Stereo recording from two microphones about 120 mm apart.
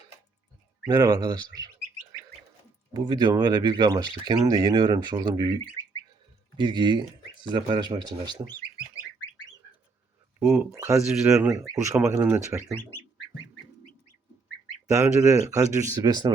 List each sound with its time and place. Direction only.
0.9 s speech: 35° right (ahead or behind)
2.9 s speech: 35° right (ahead or behind)
6.6 s speech: 40° right (ahead or behind)
10.4 s speech: 5° right (ahead or behind)
10.7 s speech: 25° right (ahead or behind)
11.1 s speech: 5° right (ahead or behind)
11.7 s speech: 25° right (ahead or behind)
11.9 s speech: 15° right (ahead or behind)
15.2 s speech: 25° right (ahead or behind)